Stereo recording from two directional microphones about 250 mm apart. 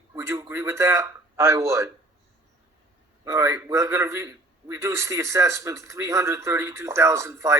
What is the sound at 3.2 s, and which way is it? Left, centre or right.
A man's voice, centre.